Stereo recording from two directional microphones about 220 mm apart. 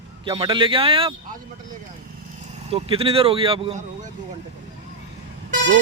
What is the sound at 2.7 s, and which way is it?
Speech, 25° right (ahead or behind).